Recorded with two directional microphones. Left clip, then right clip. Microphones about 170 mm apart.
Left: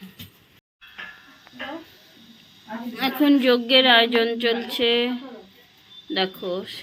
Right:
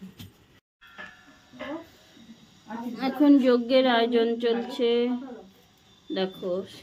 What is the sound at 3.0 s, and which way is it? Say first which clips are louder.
A woman's voice: left 1 dB; 5° right (ahead or behind).